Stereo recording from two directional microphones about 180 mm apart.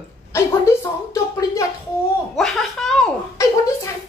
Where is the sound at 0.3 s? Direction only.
15° left (ahead or behind).